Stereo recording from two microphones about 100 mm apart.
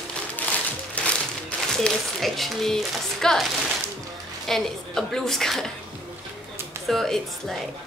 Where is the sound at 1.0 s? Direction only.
10° left (ahead or behind).